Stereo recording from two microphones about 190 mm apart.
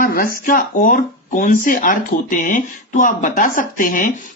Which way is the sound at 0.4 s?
45° left (ahead or behind).